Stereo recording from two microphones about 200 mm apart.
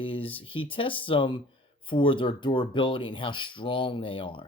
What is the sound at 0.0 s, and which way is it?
Speech, 25° left (ahead or behind).